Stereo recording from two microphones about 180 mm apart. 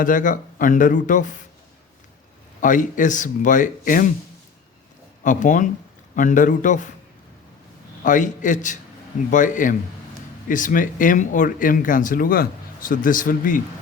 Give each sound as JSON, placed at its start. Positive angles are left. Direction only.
{"t": 0.0, "sound": "speech", "side_deg": 45}
{"t": 2.6, "sound": "speech", "side_deg": 45}
{"t": 5.2, "sound": "speech", "side_deg": 45}
{"t": 8.0, "sound": "speech", "side_deg": 45}